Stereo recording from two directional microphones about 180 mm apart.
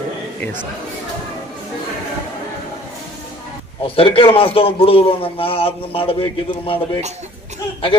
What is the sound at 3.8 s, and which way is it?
A man's voice, 30° left (ahead or behind).